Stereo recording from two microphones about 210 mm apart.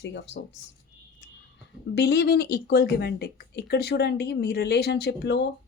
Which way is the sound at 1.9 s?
50° left (ahead or behind).